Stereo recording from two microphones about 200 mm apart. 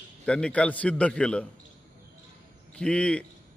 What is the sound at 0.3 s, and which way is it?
A man's voice, 5° left (ahead or behind).